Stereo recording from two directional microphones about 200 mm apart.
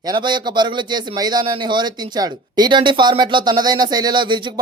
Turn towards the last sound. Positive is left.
turn(degrees=-25)  # may be behind; listen again after turning